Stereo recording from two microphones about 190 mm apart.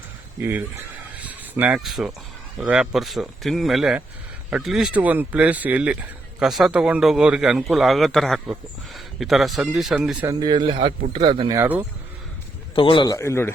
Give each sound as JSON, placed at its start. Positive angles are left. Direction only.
{"t": 0.3, "sound": "speech", "side_deg": -10}
{"t": 1.1, "sound": "a sound", "side_deg": -10}
{"t": 2.6, "sound": "speech", "side_deg": -5}
{"t": 10.2, "sound": "speech", "side_deg": -20}
{"t": 12.7, "sound": "a man's voice", "side_deg": 25}